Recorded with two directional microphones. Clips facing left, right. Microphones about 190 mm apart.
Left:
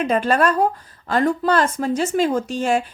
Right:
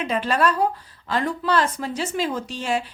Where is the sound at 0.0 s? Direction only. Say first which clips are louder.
Left 4 dB; 45° left (ahead or behind).